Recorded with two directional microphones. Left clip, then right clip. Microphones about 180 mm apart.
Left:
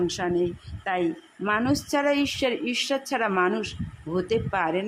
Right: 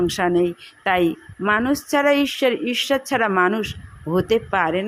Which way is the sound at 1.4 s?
20° right (ahead or behind).